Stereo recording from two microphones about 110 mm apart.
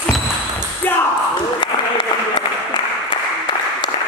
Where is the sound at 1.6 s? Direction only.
45° left (ahead or behind).